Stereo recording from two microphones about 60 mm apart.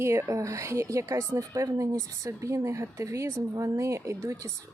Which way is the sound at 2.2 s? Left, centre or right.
Right.